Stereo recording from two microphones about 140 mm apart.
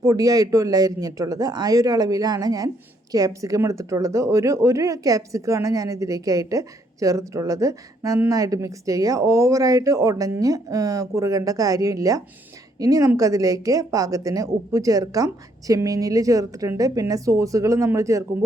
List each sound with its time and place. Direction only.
0.0 s a woman's voice: 25° right (ahead or behind)